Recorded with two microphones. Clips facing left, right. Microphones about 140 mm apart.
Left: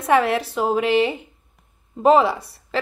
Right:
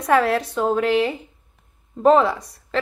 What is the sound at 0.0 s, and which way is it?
Speech, centre (ahead or behind).